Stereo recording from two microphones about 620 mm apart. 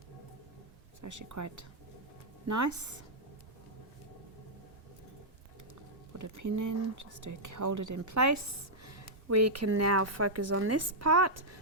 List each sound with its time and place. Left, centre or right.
1.0 s speech: right
6.1 s speech: right